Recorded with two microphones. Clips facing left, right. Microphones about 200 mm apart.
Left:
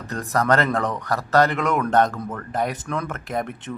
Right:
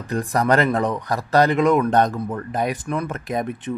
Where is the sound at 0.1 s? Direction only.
15° right (ahead or behind).